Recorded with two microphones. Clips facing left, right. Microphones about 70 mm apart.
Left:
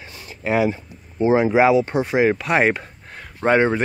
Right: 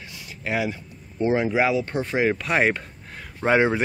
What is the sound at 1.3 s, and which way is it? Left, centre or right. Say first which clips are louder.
A man's voice: left 6 dB; left.